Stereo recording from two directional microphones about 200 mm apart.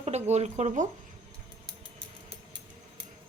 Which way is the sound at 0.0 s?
35° right (ahead or behind).